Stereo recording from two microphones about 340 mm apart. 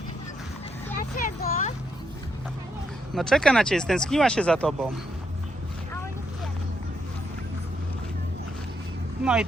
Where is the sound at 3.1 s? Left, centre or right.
Centre.